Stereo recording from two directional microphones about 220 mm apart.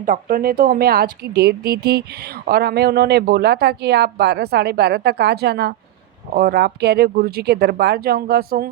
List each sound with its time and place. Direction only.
0.0 s speech: 40° right (ahead or behind)